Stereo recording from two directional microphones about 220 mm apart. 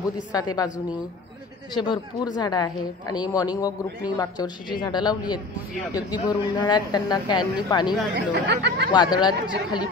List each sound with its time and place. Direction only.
0.3 s a woman's voice: 15° left (ahead or behind)
1.7 s speech: 20° left (ahead or behind)
8.5 s speech: 50° right (ahead or behind)
8.9 s speech: 20° left (ahead or behind)